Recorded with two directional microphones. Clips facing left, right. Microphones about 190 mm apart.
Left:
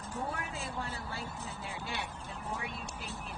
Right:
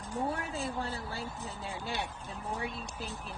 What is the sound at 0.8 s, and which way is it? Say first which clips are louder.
Speech: right 3 dB; 35° right (ahead or behind).